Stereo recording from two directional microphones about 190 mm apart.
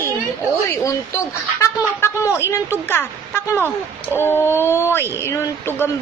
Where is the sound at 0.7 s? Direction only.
15° left (ahead or behind).